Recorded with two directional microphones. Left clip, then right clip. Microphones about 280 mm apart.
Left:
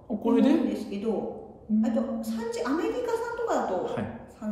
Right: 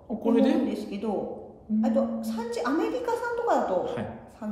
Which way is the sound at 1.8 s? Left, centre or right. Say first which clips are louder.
Right 5 dB; centre.